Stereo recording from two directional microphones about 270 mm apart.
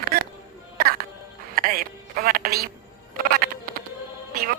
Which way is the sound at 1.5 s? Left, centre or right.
Right.